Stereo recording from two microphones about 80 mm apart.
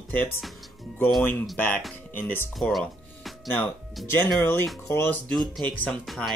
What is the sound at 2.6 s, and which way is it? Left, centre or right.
Music, centre.